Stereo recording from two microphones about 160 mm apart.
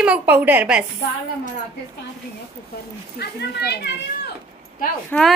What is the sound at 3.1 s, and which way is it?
Speech, 85° left.